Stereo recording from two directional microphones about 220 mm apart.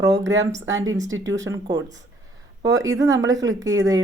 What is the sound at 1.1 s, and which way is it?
Speech, 60° right (ahead or behind).